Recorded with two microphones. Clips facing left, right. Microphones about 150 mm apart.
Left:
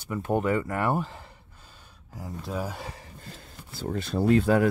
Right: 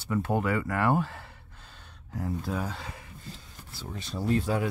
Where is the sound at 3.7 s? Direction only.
50° left (ahead or behind).